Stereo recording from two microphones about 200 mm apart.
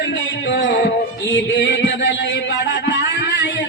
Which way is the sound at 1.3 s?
65° left (ahead or behind).